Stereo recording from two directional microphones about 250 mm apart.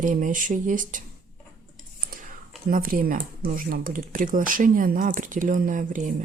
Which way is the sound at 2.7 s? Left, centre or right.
Right.